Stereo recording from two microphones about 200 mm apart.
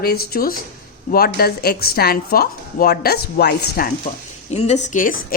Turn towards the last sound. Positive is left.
turn(degrees=40)  # may be behind; listen again after turning